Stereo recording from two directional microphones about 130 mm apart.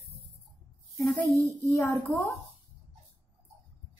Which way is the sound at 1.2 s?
25° right (ahead or behind).